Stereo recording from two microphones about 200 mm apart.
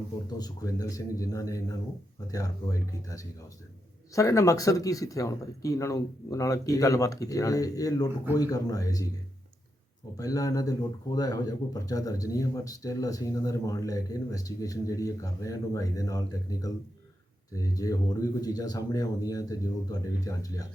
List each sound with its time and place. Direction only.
0.3 s a man's voice: 20° left (ahead or behind)
10.2 s a man's voice: 15° left (ahead or behind)